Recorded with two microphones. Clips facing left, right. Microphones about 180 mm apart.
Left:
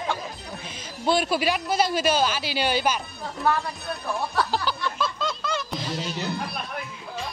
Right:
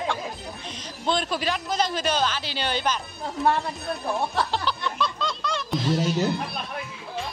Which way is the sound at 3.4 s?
25° right (ahead or behind).